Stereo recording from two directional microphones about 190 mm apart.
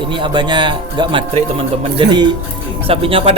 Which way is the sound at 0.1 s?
25° right (ahead or behind).